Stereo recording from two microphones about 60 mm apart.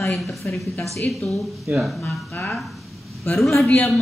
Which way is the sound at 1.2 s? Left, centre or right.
Left.